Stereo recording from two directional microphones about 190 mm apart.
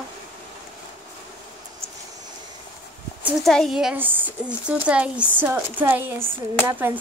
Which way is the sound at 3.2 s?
Centre (ahead or behind).